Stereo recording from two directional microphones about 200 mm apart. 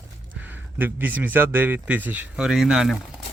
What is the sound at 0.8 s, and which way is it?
Speech, 10° right (ahead or behind).